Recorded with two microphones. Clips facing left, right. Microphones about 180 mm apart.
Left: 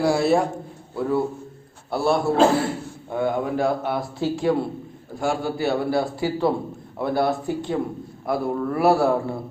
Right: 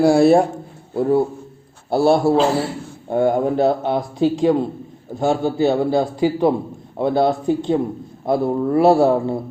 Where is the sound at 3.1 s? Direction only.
45° right (ahead or behind).